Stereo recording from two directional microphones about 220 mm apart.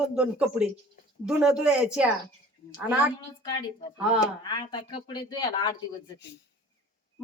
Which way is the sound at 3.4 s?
25° left (ahead or behind).